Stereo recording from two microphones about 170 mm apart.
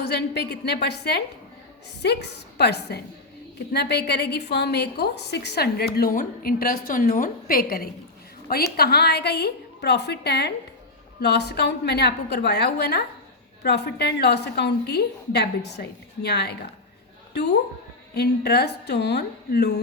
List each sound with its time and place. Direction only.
0.1 s a woman's voice: 75° left (ahead or behind)
18.1 s a woman's voice: 70° left (ahead or behind)